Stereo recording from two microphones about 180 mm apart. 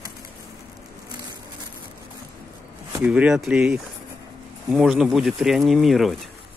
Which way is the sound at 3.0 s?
5° right (ahead or behind).